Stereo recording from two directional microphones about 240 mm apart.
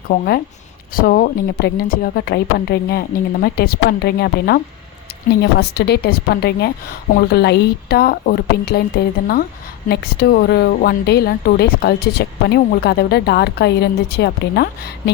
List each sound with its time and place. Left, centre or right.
0.1 s a woman's voice: left